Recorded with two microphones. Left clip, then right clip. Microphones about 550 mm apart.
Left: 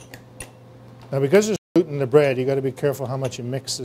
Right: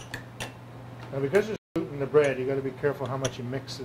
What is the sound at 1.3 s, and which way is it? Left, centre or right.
Speech, left.